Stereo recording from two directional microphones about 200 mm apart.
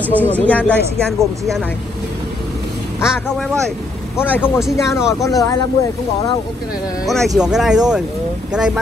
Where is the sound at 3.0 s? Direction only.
5° right (ahead or behind).